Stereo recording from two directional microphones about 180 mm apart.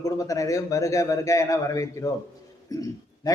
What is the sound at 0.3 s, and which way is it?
A man's voice, 20° left (ahead or behind).